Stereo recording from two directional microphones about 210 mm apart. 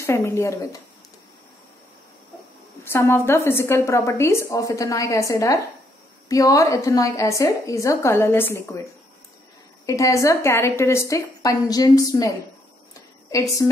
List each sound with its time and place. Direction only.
0.0 s a woman's voice: 10° left (ahead or behind)
2.8 s a woman's voice: 10° left (ahead or behind)
9.8 s a woman's voice: 15° left (ahead or behind)
13.3 s a woman's voice: 15° left (ahead or behind)